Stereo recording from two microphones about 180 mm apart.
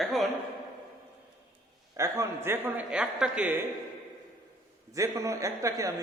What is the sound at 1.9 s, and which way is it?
A man's voice, 15° right (ahead or behind).